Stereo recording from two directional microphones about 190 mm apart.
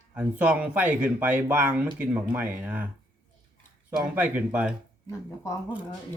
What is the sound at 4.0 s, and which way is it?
Speech, 10° right (ahead or behind).